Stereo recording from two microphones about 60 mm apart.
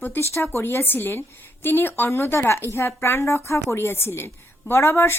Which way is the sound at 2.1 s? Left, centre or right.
Left.